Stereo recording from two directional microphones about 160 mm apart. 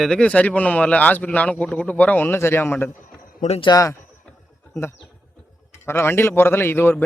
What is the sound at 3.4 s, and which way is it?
Speech, 40° left (ahead or behind).